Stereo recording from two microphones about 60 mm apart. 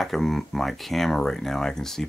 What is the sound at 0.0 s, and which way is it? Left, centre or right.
Speech, centre.